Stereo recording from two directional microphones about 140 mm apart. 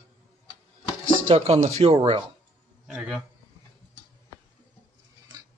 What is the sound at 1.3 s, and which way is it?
Speech, 50° right (ahead or behind).